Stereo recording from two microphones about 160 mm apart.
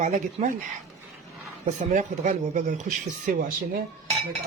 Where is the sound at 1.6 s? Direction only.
50° right (ahead or behind).